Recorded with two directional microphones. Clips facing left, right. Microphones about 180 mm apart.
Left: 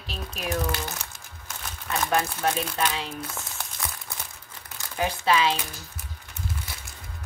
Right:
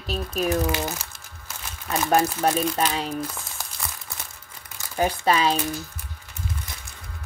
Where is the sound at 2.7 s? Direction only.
40° right (ahead or behind).